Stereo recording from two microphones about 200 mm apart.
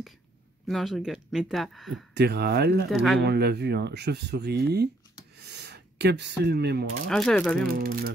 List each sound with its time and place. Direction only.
0.7 s speech: centre (ahead or behind)
2.1 s speech: 55° right (ahead or behind)
2.9 s speech: centre (ahead or behind)
3.3 s speech: 55° right (ahead or behind)
5.4 s rub: 55° right (ahead or behind)
7.1 s speech: 5° left (ahead or behind)
7.6 s speech: 50° right (ahead or behind)